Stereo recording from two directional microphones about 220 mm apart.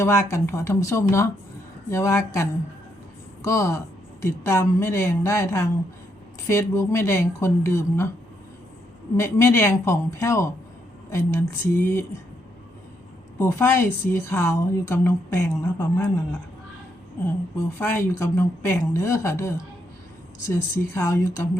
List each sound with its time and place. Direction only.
0.0 s a woman's voice: 10° left (ahead or behind)
9.1 s a woman's voice: 10° left (ahead or behind)
13.4 s a woman's voice: 10° left (ahead or behind)
17.7 s a woman's voice: 10° left (ahead or behind)